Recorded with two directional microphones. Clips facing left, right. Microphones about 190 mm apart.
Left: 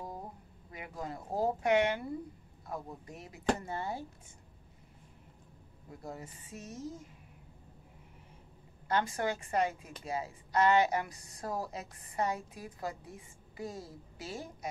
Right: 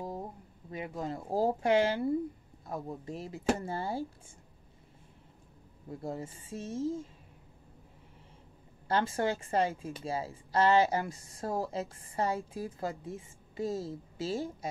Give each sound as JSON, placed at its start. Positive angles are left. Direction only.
{"t": 0.7, "sound": "speech", "side_deg": -25}
{"t": 5.9, "sound": "speech", "side_deg": -25}
{"t": 8.8, "sound": "speech", "side_deg": -30}